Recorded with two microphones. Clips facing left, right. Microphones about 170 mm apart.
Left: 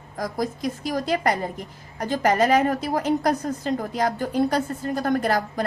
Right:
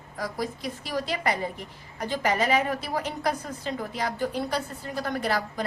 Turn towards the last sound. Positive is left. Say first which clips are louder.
# left 5 dB
turn(degrees=45)  # may be behind; listen again after turning